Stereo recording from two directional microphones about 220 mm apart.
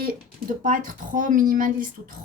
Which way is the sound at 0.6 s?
35° right (ahead or behind).